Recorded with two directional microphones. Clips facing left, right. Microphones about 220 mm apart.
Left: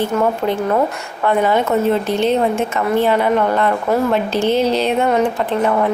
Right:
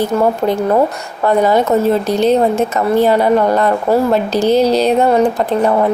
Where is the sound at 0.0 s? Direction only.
40° right (ahead or behind).